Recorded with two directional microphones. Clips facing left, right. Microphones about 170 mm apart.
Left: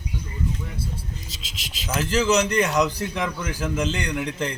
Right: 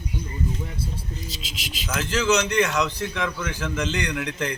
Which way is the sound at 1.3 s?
Centre (ahead or behind).